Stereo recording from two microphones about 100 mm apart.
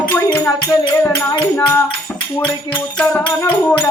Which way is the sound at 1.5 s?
20° left (ahead or behind).